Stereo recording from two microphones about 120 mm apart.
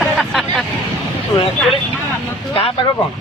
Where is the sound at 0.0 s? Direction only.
Centre (ahead or behind).